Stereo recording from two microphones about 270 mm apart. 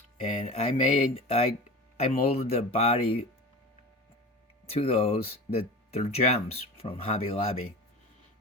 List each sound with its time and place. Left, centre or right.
0.2 s speech: left
4.7 s speech: left